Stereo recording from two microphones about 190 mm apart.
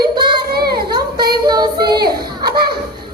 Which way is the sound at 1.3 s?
20° right (ahead or behind).